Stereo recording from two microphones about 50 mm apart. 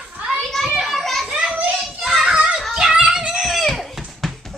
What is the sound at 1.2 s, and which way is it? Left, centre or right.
Children playing, centre.